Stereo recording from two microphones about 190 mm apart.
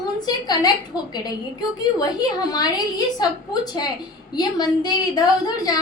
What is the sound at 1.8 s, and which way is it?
A woman's voice, 20° left (ahead or behind).